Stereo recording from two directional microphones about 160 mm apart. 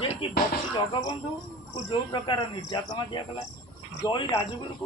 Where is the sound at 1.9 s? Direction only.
30° left (ahead or behind).